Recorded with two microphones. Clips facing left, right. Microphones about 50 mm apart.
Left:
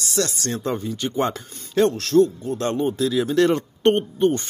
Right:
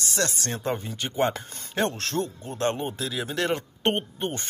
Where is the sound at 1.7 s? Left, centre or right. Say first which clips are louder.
Left 9 dB; right.